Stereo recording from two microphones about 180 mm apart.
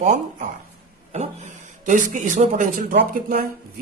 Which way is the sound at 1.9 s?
45° right (ahead or behind).